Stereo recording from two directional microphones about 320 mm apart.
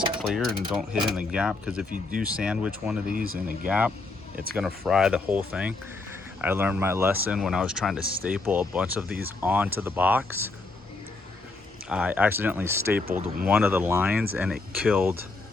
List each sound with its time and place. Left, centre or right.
0.2 s speech: centre
1.9 s speech: right
2.2 s speech: centre
3.1 s speech: right
3.7 s speech: centre
11.9 s speech: centre
13.1 s speech: right
13.5 s speech: centre